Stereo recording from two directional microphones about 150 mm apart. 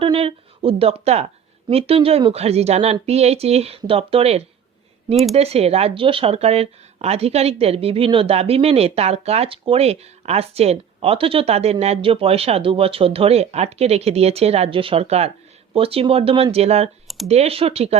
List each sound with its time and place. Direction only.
0.0 s a woman's voice: 35° right (ahead or behind)